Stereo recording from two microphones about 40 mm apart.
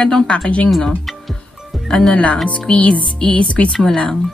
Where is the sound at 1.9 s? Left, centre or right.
Centre.